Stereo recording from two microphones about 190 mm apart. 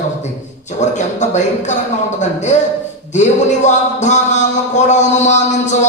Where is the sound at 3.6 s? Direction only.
40° left (ahead or behind).